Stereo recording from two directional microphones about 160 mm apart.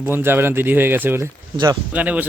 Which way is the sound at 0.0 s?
15° right (ahead or behind).